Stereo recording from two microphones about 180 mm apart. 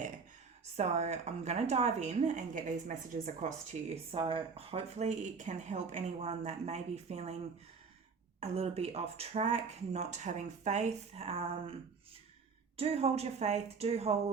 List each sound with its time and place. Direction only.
0.8 s speech: 35° right (ahead or behind)
3.7 s speech: 30° right (ahead or behind)
8.4 s speech: 35° right (ahead or behind)
12.7 s speech: 35° right (ahead or behind)